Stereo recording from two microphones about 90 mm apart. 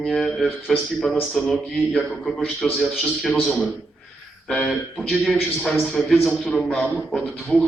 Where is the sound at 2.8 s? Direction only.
Centre (ahead or behind).